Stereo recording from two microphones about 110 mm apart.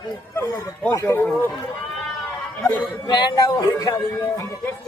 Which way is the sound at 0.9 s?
25° left (ahead or behind).